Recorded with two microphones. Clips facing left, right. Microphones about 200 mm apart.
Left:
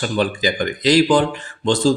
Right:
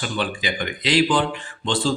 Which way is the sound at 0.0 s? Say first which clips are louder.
Left 6 dB; 40° left (ahead or behind).